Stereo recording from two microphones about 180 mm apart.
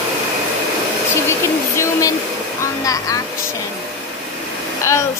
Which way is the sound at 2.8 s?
20° left (ahead or behind).